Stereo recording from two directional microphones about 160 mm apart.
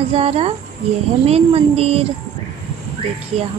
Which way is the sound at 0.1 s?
40° right (ahead or behind).